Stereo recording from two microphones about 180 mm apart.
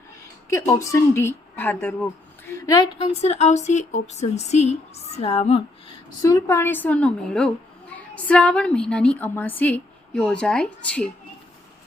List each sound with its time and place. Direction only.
0.5 s a woman's voice: 15° left (ahead or behind)
3.0 s a woman's voice: 35° left (ahead or behind)
6.2 s a woman's voice: 15° left (ahead or behind)